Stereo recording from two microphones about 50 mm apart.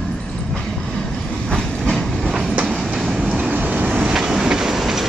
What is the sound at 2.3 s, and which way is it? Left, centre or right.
Train, centre.